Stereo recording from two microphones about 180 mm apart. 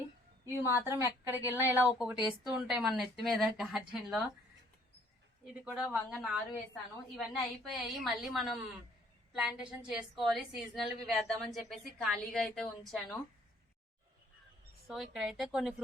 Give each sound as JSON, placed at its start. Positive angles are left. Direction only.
{"t": 0.4, "sound": "a woman's voice", "side_deg": -15}
{"t": 5.5, "sound": "a woman's voice", "side_deg": -5}
{"t": 7.6, "sound": "a woman's voice", "side_deg": 0}
{"t": 14.8, "sound": "a woman's voice", "side_deg": 0}